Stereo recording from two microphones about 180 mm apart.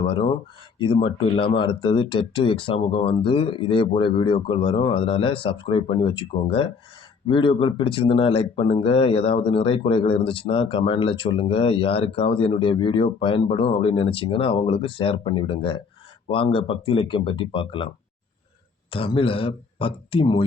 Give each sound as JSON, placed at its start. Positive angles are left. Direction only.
{"t": 0.0, "sound": "speech", "side_deg": 30}